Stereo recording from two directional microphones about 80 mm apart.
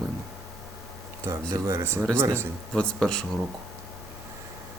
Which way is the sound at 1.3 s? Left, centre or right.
Right.